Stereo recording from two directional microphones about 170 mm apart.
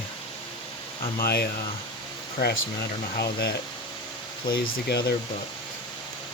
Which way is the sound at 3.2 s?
70° left (ahead or behind).